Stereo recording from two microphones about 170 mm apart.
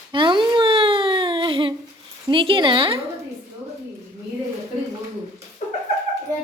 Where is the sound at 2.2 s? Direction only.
30° right (ahead or behind).